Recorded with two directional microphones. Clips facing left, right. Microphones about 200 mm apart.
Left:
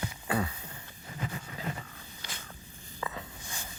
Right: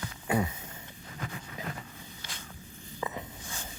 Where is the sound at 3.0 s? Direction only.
20° right (ahead or behind).